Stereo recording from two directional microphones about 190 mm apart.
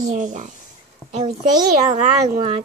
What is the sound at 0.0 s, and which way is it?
Speech, 40° right (ahead or behind).